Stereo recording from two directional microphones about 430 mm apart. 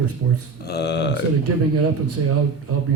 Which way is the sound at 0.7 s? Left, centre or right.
Left.